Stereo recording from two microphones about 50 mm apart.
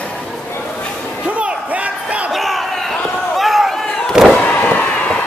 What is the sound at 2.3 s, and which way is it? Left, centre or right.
Crowd, centre.